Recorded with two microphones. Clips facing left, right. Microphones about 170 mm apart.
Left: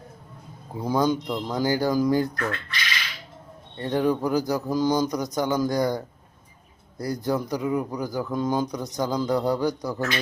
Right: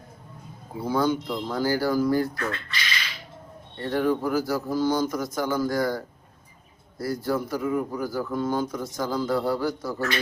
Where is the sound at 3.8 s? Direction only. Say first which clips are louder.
Left 1 dB; 20° left (ahead or behind).